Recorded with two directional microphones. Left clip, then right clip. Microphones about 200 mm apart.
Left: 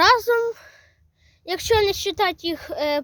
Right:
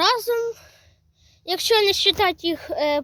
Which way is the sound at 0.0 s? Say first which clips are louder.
Left 4 dB; 25° left (ahead or behind).